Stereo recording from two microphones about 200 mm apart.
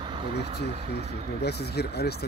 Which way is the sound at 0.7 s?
30° right (ahead or behind).